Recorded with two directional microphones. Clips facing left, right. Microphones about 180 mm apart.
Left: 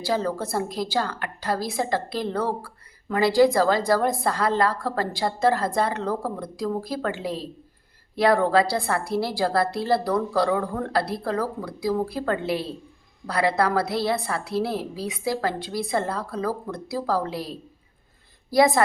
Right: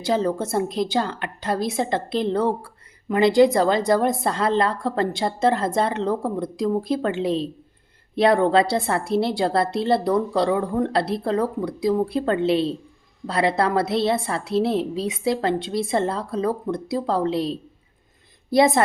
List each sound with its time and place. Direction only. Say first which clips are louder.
0.0 s a woman's voice: right 3 dB; 20° right (ahead or behind)